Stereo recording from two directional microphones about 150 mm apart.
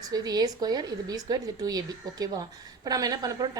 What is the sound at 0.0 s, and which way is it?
A woman's voice, 25° right (ahead or behind).